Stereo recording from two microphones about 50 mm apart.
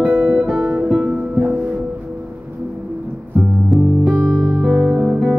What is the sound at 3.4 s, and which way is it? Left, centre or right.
Music, centre.